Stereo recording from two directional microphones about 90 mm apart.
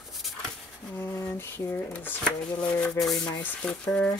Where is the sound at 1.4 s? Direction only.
25° left (ahead or behind).